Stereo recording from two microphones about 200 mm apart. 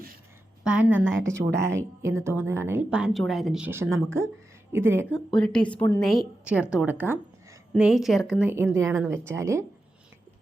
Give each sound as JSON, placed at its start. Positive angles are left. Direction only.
{"t": 0.6, "sound": "a woman's voice", "side_deg": -5}
{"t": 5.3, "sound": "a woman's voice", "side_deg": 5}
{"t": 6.1, "sound": "a woman's voice", "side_deg": -5}